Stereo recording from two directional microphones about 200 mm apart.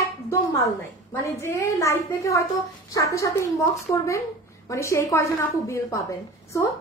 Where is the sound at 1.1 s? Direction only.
15° left (ahead or behind).